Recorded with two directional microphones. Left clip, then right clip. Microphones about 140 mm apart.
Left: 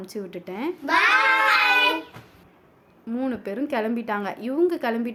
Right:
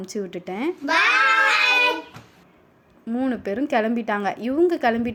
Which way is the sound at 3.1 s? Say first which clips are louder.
Right 3 dB; 10° right (ahead or behind).